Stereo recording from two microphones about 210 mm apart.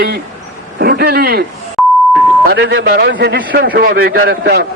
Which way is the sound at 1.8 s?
Centre (ahead or behind).